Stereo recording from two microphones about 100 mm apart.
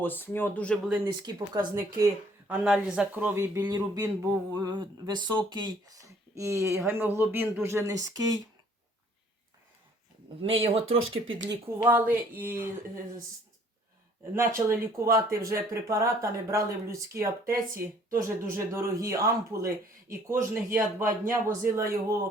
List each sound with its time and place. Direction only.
0.0 s speech: 20° left (ahead or behind)
1.2 s speech: 40° right (ahead or behind)
2.5 s speech: 10° right (ahead or behind); by 3.6 s 25° right (ahead or behind)
3.6 s speech: 40° right (ahead or behind)
10.5 s speech: 70° right (ahead or behind)
11.9 s speech: 20° right (ahead or behind)
14.3 s speech: 25° right (ahead or behind)